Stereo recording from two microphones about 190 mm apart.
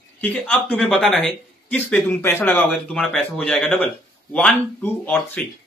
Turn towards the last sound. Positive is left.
turn(degrees=10)  # may be behind; listen again after turning